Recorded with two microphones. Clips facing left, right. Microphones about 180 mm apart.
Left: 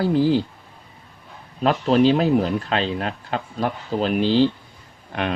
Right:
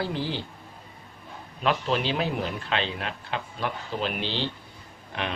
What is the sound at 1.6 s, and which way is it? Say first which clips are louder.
A man's voice: left 9 dB; 40° left (ahead or behind).